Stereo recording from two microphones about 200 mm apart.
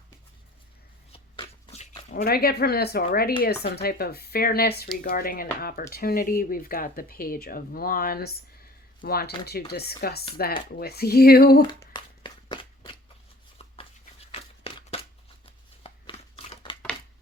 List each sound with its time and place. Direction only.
1.1 s shuffling cards: 25° left (ahead or behind)
2.2 s speech: 50° left (ahead or behind)
11.8 s a sound: 20° left (ahead or behind)